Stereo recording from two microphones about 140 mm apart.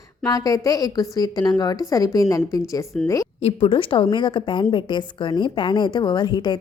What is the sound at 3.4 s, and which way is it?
A woman's voice, 40° left (ahead or behind).